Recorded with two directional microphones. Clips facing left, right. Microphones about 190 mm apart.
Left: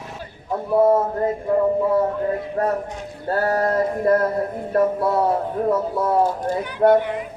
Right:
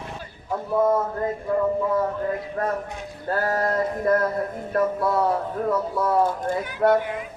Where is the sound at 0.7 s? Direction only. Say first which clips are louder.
Left 5 dB; 35° left (ahead or behind).